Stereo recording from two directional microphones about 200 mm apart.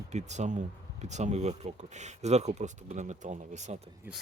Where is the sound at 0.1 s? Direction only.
35° right (ahead or behind).